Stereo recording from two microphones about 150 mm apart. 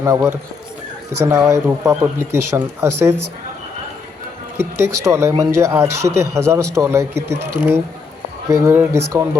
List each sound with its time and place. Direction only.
0.0 s speech: 20° right (ahead or behind)
4.5 s speech: 15° right (ahead or behind)
8.4 s speech: 15° right (ahead or behind)